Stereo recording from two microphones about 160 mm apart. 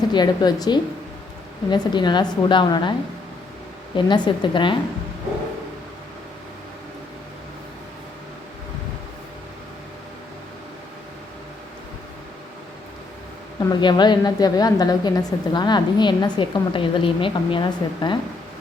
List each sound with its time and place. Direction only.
0.1 s a woman's voice: 25° left (ahead or behind)
3.9 s a woman's voice: 30° left (ahead or behind)
13.6 s a woman's voice: 25° left (ahead or behind)